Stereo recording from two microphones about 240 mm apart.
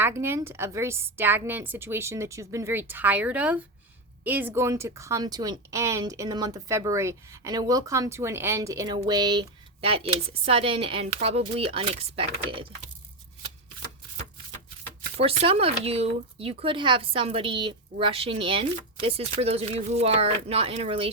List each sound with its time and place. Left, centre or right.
0.0 s speech: centre
15.2 s speech: right